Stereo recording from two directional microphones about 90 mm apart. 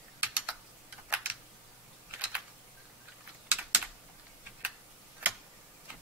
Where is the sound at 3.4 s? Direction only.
15° right (ahead or behind).